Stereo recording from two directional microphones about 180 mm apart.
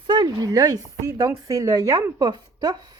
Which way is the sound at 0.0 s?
25° right (ahead or behind).